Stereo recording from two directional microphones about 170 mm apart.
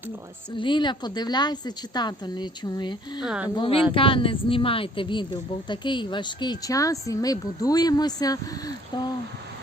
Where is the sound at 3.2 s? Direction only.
5° right (ahead or behind).